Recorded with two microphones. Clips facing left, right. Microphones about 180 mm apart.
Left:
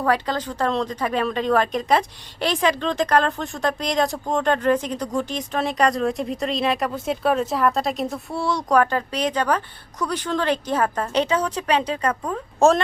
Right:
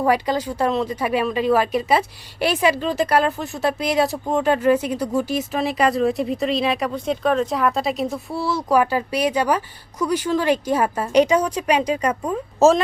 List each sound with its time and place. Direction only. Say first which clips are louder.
0.0 s a woman's voice: right 3 dB; 10° right (ahead or behind)